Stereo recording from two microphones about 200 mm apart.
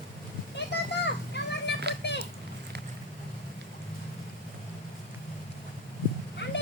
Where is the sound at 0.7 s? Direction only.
60° left (ahead or behind).